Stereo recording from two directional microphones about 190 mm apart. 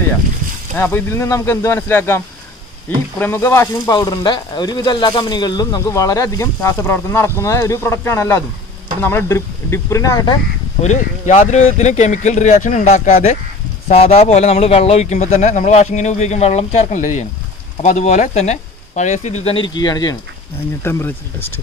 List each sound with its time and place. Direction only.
0.7 s speech: 10° left (ahead or behind)
10.8 s a man's voice: 35° left (ahead or behind); by 21.5 s 10° left (ahead or behind)